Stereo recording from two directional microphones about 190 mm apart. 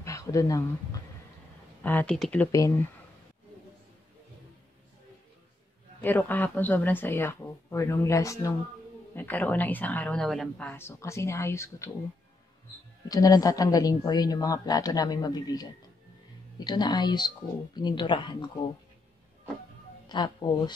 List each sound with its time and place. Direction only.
0.0 s a sound: 15° left (ahead or behind)
1.8 s speech: 10° left (ahead or behind)
6.0 s speech: 10° left (ahead or behind)
13.1 s speech: 20° left (ahead or behind)
20.1 s speech: 25° left (ahead or behind)